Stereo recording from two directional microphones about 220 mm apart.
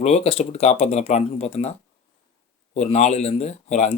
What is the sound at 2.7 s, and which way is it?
Speech, 30° left (ahead or behind).